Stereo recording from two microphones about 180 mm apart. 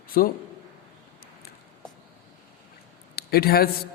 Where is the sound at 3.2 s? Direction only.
60° left (ahead or behind).